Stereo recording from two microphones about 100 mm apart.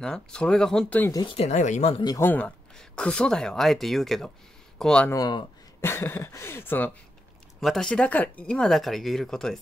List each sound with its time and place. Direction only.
0.0 s speech: 10° left (ahead or behind)
1.2 s speech: 80° left
2.1 s speech: 20° left (ahead or behind)
2.7 s speech: 5° left (ahead or behind)
5.1 s speech: 40° left (ahead or behind)
5.8 s speech: 25° left (ahead or behind)
7.6 s speech: 5° left (ahead or behind)